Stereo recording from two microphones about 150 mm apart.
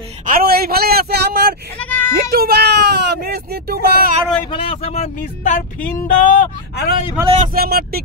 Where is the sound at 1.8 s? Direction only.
10° left (ahead or behind).